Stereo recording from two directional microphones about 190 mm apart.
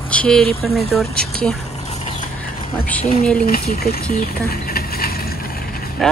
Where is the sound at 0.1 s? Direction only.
5° left (ahead or behind).